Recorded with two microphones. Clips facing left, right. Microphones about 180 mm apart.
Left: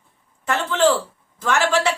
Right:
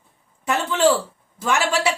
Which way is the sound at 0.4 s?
10° right (ahead or behind).